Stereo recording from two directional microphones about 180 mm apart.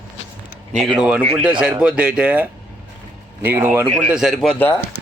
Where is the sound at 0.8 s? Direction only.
Centre (ahead or behind).